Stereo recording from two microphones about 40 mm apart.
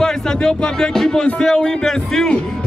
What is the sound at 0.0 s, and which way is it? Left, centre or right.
Speech, centre.